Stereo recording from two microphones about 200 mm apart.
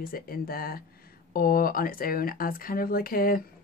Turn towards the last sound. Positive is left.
turn(degrees=45)  # may be behind; listen again after turning